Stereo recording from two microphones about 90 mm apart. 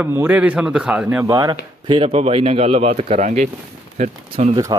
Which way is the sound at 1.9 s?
90° right.